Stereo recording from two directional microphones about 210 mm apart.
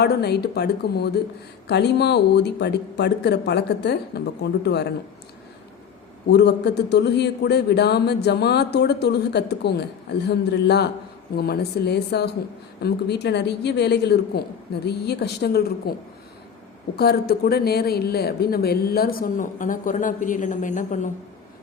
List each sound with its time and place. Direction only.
0.0 s a man's voice: 50° left (ahead or behind)
6.3 s a man's voice: 55° left (ahead or behind); by 21.1 s 35° left (ahead or behind)